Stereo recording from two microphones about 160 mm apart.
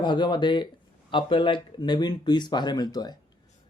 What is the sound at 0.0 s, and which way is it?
Speech, 30° left (ahead or behind).